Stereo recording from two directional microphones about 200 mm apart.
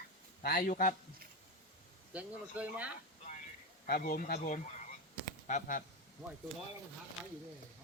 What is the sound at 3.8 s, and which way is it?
Speech, 45° left (ahead or behind).